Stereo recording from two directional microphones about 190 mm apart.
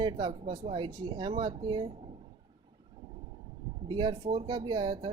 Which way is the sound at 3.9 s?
25° right (ahead or behind).